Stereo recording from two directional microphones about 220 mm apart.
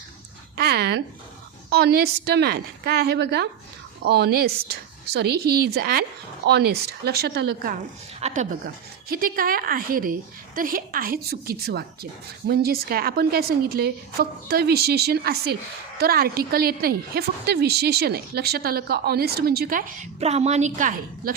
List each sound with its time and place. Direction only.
0.5 s a woman's voice: 45° right (ahead or behind)